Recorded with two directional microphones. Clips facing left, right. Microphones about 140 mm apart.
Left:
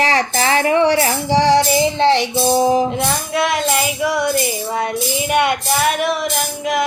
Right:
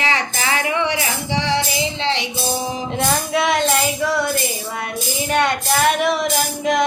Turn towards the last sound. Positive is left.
turn(degrees=0)  # may be behind; listen again after turning